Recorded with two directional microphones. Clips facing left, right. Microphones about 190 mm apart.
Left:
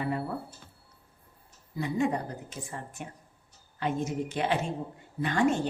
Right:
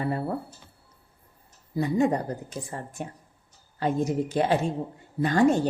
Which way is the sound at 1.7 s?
40° right (ahead or behind).